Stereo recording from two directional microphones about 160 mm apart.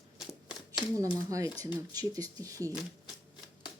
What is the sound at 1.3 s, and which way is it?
Speech, 20° right (ahead or behind).